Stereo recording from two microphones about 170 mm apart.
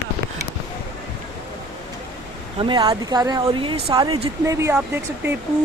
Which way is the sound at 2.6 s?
30° right (ahead or behind).